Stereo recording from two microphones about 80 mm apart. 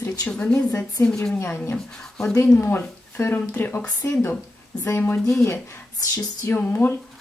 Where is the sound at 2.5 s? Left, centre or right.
Left.